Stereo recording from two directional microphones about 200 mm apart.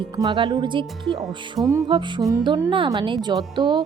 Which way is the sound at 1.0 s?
Centre (ahead or behind).